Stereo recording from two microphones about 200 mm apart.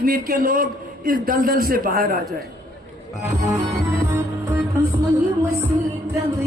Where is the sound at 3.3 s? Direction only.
15° right (ahead or behind).